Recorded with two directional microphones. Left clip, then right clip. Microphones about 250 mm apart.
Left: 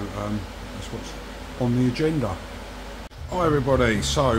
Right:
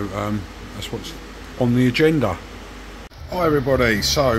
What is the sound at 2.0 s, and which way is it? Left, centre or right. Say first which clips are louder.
Speech: right 7 dB; right.